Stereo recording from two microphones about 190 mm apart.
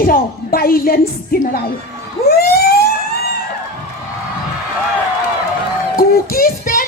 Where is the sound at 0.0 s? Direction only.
50° left (ahead or behind).